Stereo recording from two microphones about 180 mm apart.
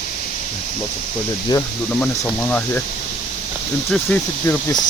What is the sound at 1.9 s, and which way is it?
Speech, 10° left (ahead or behind).